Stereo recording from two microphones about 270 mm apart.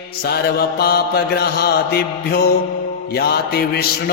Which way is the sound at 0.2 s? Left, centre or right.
Left.